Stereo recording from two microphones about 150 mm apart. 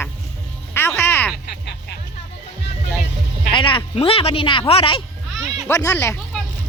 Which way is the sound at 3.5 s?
35° left (ahead or behind).